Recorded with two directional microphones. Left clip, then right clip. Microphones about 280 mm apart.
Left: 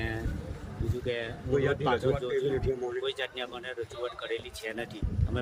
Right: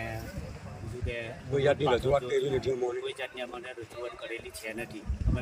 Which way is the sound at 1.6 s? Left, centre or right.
Right.